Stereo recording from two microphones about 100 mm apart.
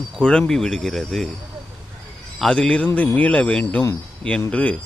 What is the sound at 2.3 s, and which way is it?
Speech, 5° left (ahead or behind).